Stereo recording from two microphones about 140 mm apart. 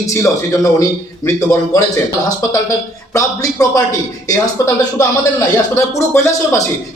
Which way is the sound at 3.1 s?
25° left (ahead or behind).